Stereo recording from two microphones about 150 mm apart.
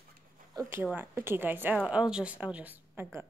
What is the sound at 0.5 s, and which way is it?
A woman's voice, 15° right (ahead or behind).